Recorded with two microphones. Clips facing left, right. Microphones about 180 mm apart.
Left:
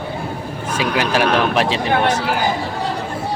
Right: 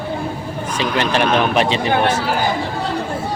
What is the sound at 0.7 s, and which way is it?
Speech, 5° left (ahead or behind).